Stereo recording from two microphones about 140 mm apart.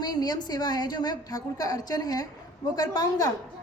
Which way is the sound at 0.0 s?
30° left (ahead or behind).